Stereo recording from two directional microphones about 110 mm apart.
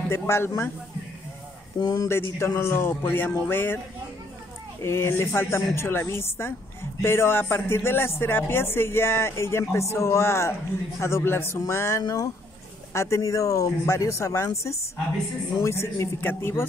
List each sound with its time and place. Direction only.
0.1 s speech: 25° left (ahead or behind)
1.8 s speech: 35° left (ahead or behind)
2.0 s speech: 25° left (ahead or behind)
4.8 s speech: 20° left (ahead or behind)